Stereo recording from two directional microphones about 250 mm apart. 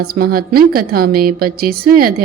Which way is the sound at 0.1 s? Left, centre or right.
Right.